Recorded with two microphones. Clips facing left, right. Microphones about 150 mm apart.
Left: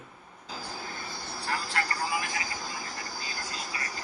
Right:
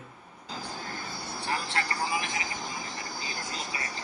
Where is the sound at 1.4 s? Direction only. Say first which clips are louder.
Even; 20° right (ahead or behind).